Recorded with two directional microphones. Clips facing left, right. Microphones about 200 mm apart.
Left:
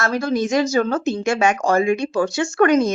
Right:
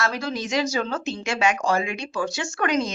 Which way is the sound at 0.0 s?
50° left (ahead or behind).